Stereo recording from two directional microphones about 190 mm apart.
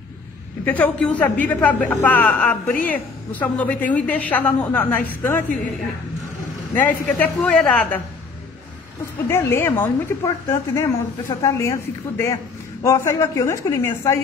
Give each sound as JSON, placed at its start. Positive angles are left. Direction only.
{"t": 0.7, "sound": "a woman's voice", "side_deg": 10}
{"t": 6.7, "sound": "a woman's voice", "side_deg": 10}
{"t": 9.3, "sound": "a woman's voice", "side_deg": 15}
{"t": 12.8, "sound": "a woman's voice", "side_deg": 15}